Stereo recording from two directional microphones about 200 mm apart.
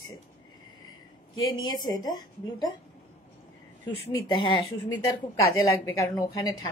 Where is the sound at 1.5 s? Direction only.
20° left (ahead or behind).